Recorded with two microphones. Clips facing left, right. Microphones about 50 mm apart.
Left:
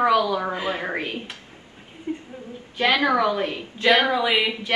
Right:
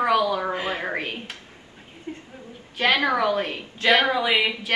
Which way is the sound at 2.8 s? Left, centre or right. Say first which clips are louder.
Left 1 dB; centre.